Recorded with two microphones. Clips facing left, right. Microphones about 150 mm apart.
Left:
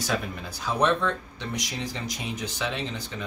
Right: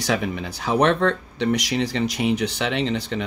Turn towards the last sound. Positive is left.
turn(degrees=-75)  # may be behind; listen again after turning